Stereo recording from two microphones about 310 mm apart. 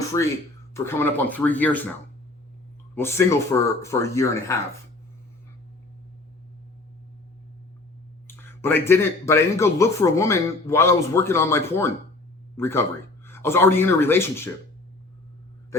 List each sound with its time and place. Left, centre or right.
0.0 s a sound: centre
0.7 s speech: centre
2.9 s a man's voice: centre
8.3 s a man's voice: centre